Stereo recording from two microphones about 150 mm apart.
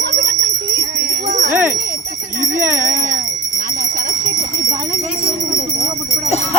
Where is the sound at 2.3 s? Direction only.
60° right (ahead or behind).